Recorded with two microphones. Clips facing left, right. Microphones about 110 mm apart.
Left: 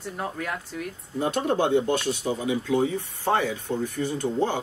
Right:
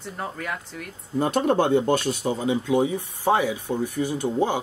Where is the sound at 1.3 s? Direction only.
45° right (ahead or behind).